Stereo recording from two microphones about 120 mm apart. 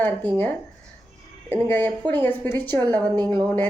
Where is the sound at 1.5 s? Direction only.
15° left (ahead or behind).